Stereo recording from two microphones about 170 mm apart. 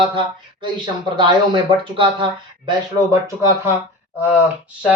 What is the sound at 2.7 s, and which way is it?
Speech, 15° right (ahead or behind).